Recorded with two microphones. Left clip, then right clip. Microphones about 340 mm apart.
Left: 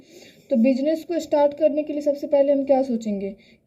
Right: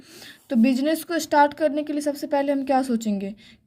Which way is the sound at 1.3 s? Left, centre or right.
Right.